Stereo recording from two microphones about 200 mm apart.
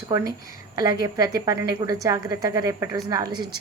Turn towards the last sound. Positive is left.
turn(degrees=-20)  # may be behind; listen again after turning